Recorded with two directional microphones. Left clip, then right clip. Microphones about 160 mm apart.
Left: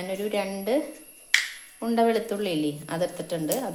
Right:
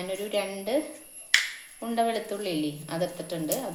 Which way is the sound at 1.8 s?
45° left (ahead or behind).